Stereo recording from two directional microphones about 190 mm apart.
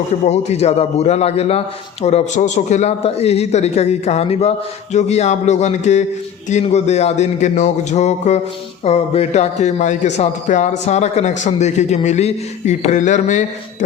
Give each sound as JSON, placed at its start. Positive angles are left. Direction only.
{"t": 0.3, "sound": "a man's voice", "side_deg": 35}